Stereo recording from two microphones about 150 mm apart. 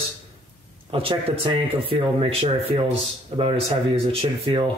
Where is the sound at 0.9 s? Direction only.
40° right (ahead or behind).